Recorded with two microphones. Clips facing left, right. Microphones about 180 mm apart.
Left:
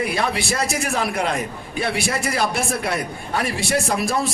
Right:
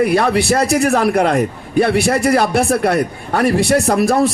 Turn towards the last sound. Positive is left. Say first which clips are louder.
# right 8 dB
turn(degrees=-60)  # may be behind; listen again after turning